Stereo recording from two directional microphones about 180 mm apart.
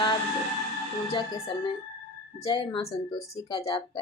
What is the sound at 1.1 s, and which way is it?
Speech, 25° left (ahead or behind).